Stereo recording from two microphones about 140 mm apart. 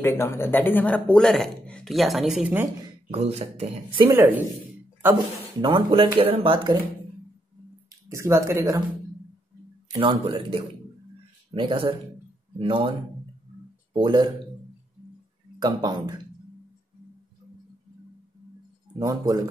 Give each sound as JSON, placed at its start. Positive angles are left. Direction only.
{"t": 0.0, "sound": "speech", "side_deg": 20}
{"t": 2.4, "sound": "speech", "side_deg": -15}
{"t": 3.1, "sound": "speech", "side_deg": -45}
{"t": 4.1, "sound": "speech", "side_deg": -15}
{"t": 5.6, "sound": "speech", "side_deg": -35}
{"t": 8.1, "sound": "speech", "side_deg": -20}
{"t": 9.9, "sound": "speech", "side_deg": -35}
{"t": 11.5, "sound": "speech", "side_deg": -35}
{"t": 13.9, "sound": "speech", "side_deg": -35}
{"t": 15.6, "sound": "speech", "side_deg": -30}
{"t": 18.9, "sound": "speech", "side_deg": -25}